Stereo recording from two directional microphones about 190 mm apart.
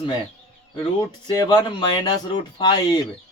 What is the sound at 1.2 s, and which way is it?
Speech, 20° left (ahead or behind).